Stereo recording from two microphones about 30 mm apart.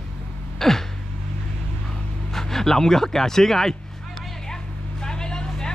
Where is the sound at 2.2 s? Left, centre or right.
Centre.